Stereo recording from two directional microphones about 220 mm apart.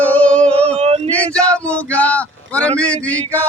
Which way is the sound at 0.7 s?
25° right (ahead or behind).